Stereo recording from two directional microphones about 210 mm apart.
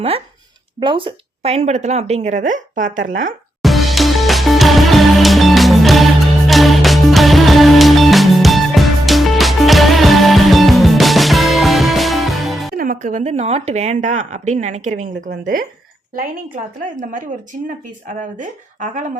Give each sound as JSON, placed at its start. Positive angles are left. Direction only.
{"t": 0.8, "sound": "speech", "side_deg": -25}
{"t": 3.6, "sound": "music", "side_deg": 0}
{"t": 12.7, "sound": "speech", "side_deg": -40}
{"t": 17.0, "sound": "speech", "side_deg": -40}